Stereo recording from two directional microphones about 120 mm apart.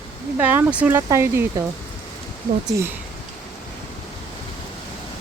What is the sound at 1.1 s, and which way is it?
Speech, 20° right (ahead or behind).